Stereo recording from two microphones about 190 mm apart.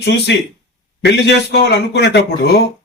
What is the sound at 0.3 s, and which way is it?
Speech, 65° left (ahead or behind).